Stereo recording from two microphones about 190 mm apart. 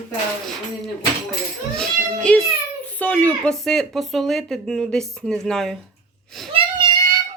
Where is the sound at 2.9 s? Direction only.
5° left (ahead or behind).